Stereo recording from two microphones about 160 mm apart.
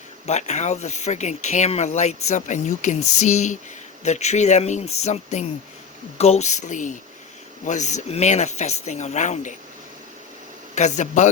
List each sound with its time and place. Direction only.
0.3 s speech: 45° left (ahead or behind)
10.8 s speech: 50° left (ahead or behind)